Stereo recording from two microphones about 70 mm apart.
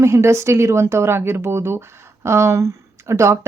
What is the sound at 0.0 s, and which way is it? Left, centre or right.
Speech, right.